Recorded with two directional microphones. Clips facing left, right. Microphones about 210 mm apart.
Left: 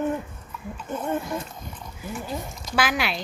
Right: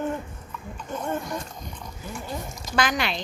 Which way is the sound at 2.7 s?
5° left (ahead or behind).